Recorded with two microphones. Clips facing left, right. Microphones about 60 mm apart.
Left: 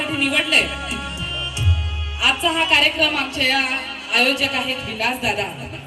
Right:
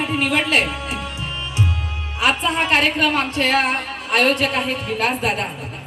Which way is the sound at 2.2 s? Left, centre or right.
Right.